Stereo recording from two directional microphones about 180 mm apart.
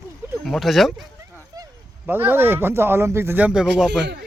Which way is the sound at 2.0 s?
10° right (ahead or behind).